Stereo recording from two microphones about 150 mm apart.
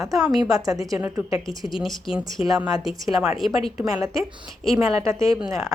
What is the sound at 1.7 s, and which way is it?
A woman's voice, centre (ahead or behind).